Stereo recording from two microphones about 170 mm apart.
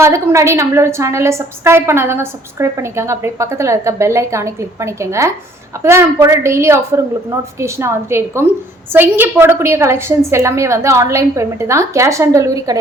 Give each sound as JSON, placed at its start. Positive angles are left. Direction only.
{"t": 0.0, "sound": "a woman's voice", "side_deg": -15}